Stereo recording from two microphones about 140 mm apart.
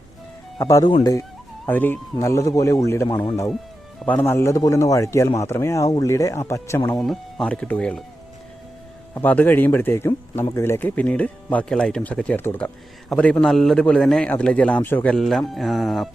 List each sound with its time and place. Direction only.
0.6 s a man's voice: 25° left (ahead or behind)
7.0 s speech: 5° left (ahead or behind)
9.1 s speech: 10° left (ahead or behind)